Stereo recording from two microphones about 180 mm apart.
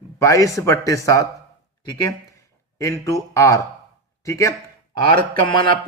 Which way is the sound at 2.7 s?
15° left (ahead or behind).